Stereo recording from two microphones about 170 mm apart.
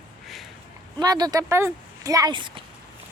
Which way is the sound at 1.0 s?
25° right (ahead or behind).